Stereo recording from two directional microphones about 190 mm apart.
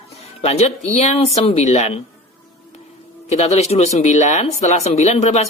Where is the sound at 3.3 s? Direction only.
35° left (ahead or behind).